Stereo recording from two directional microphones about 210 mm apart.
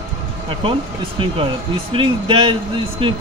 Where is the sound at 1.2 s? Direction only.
25° right (ahead or behind).